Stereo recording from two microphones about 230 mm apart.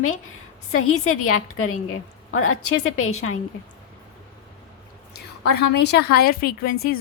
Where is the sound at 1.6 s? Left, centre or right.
Left.